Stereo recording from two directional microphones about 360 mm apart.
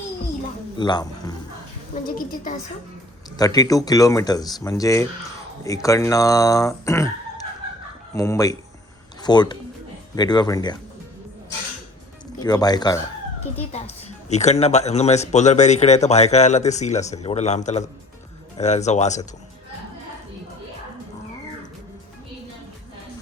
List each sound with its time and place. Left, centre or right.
0.8 s a man's voice: centre
2.0 s speech: left
3.3 s speech: centre
12.4 s speech: centre